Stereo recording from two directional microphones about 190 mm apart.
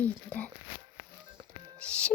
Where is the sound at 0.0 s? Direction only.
10° left (ahead or behind).